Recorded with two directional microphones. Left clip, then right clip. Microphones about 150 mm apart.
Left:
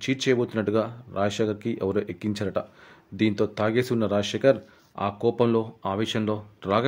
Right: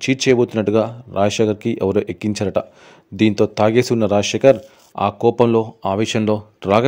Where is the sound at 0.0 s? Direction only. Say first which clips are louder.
Right 9 dB; 50° right (ahead or behind).